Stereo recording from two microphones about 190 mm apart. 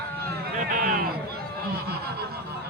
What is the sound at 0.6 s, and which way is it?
Speech, 45° right (ahead or behind).